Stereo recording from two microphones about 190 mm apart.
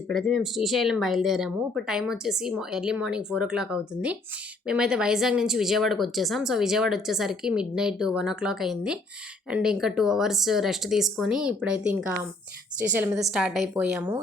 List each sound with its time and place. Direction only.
0.1 s speech: centre (ahead or behind)